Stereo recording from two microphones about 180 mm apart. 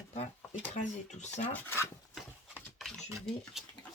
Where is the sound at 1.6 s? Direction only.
15° left (ahead or behind).